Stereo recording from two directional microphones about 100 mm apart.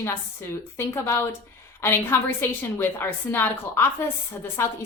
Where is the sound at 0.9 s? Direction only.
25° left (ahead or behind).